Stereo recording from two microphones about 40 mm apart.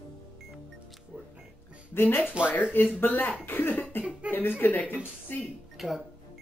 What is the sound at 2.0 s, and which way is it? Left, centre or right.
Speech, left.